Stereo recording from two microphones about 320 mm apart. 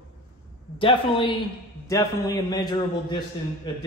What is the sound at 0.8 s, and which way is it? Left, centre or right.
Speech, centre.